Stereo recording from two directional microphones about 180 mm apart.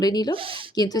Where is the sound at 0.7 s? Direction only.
20° left (ahead or behind).